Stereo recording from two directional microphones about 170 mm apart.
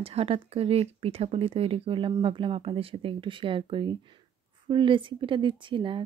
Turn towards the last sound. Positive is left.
turn(degrees=-30)  # may be behind; listen again after turning